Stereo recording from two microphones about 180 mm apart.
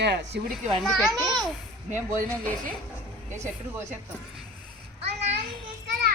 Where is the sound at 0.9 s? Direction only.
Centre (ahead or behind).